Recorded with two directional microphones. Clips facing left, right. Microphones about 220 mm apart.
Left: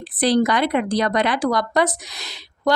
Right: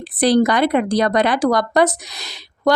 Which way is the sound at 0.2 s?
40° right (ahead or behind).